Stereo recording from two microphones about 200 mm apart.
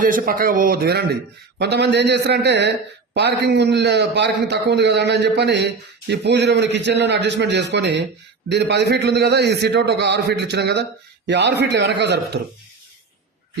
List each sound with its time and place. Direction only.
0.0 s a man's voice: 45° right (ahead or behind)